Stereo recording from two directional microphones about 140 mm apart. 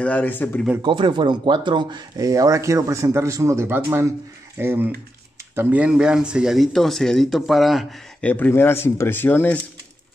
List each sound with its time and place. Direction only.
0.0 s speech: 10° left (ahead or behind)
0.8 s speech: 35° right (ahead or behind); by 9.6 s 15° left (ahead or behind)